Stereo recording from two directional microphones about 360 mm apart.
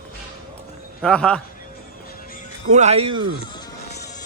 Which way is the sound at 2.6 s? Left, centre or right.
Centre.